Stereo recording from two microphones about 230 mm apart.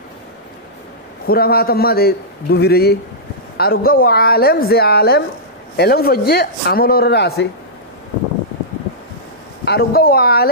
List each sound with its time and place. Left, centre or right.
1.2 s a man's voice: left
9.7 s speech: left